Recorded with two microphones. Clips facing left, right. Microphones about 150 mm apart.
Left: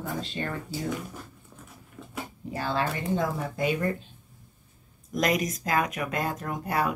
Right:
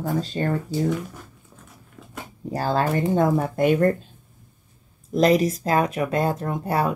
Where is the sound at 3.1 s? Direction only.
55° right (ahead or behind).